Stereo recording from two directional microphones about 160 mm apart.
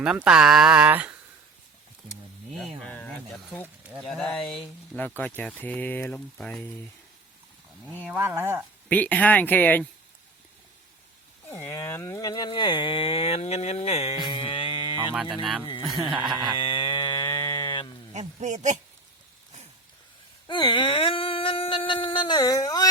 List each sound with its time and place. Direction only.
0.0 s speech: 5° right (ahead or behind)
2.6 s speech: 5° left (ahead or behind)
8.1 s speech: 10° right (ahead or behind)
8.9 s speech: 10° left (ahead or behind)
11.5 s speech: 15° left (ahead or behind)
15.1 s speech: 5° right (ahead or behind)
16.6 s cattle: 30° left (ahead or behind)
18.1 s a sound: 45° right (ahead or behind)
20.5 s a sound: 30° left (ahead or behind)